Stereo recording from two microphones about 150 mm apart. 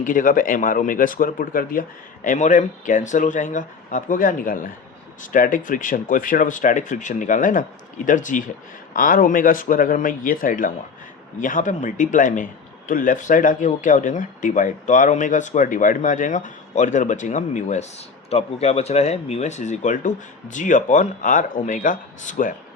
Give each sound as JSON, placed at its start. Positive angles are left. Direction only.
{"t": 0.0, "sound": "speech", "side_deg": 60}
{"t": 2.2, "sound": "speech", "side_deg": 55}